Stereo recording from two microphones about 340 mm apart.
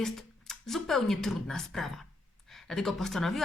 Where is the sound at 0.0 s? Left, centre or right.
Centre.